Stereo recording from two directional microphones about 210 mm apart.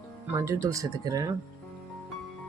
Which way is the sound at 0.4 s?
15° right (ahead or behind).